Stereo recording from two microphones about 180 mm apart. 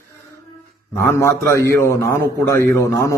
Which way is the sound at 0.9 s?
15° left (ahead or behind).